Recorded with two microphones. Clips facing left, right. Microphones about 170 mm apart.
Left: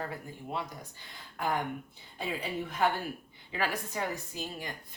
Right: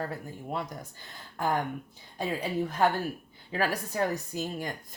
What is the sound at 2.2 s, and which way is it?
A woman's voice, 40° right (ahead or behind).